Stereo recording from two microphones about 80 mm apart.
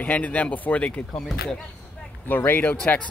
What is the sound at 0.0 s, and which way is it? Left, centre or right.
Speech, centre.